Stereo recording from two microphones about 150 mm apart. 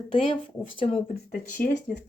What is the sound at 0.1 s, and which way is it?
Speech, 35° left (ahead or behind).